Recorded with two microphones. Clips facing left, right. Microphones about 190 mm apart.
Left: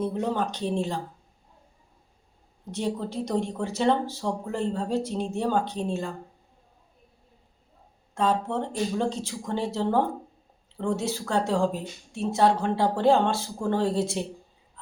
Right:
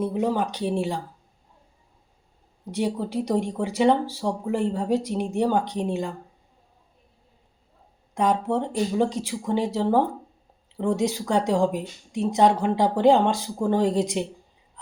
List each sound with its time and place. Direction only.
0.0 s speech: 10° right (ahead or behind)
2.7 s speech: 10° right (ahead or behind)
8.1 s speech: 15° right (ahead or behind)